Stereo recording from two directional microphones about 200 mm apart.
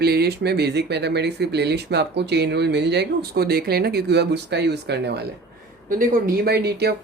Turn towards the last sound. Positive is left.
turn(degrees=-55)  # may be behind; listen again after turning